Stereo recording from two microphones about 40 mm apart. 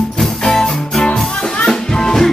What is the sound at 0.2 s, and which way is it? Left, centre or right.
Music, centre.